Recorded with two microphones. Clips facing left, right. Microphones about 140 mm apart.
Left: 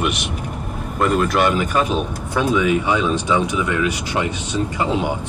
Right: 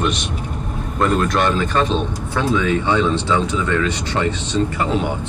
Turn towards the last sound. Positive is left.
turn(degrees=20)  # may be behind; listen again after turning